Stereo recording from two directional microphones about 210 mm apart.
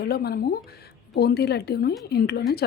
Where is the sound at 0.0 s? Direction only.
50° left (ahead or behind).